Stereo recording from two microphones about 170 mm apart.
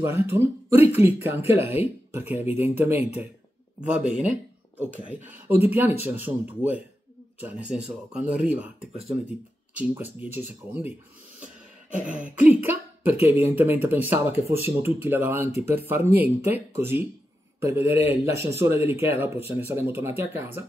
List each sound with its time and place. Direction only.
0.0 s speech: 15° right (ahead or behind)
9.8 s speech: 10° right (ahead or behind)
12.2 s speech: 10° right (ahead or behind)